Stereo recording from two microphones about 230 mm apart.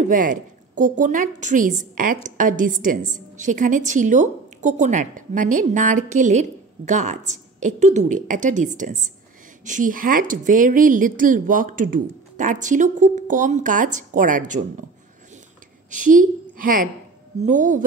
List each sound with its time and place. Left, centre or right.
0.0 s a woman's voice: right
15.9 s a woman's voice: right